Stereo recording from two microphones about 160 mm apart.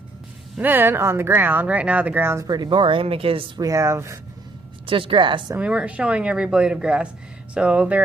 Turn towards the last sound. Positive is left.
turn(degrees=-5)  # may be behind; listen again after turning